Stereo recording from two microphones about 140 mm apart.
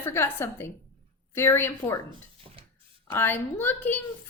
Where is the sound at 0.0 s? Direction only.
15° left (ahead or behind).